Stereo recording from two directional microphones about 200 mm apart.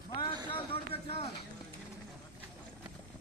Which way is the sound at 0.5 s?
25° left (ahead or behind).